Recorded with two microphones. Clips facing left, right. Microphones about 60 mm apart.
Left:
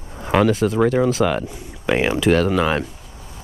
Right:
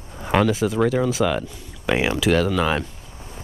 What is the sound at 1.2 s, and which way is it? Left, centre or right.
Speech, centre.